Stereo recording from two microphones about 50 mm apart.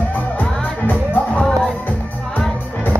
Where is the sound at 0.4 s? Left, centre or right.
Left.